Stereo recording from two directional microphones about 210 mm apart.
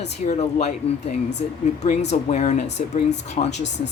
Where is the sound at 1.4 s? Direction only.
30° left (ahead or behind).